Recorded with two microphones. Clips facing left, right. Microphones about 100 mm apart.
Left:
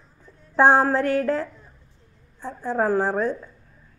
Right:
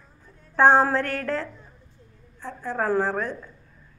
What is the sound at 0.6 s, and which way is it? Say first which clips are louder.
Speech: left 1 dB; 15° left (ahead or behind).